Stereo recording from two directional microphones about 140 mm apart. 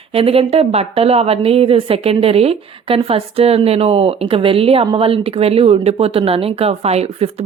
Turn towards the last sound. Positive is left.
turn(degrees=-45)  # may be behind; listen again after turning